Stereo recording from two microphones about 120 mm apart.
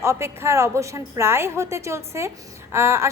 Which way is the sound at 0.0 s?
25° right (ahead or behind).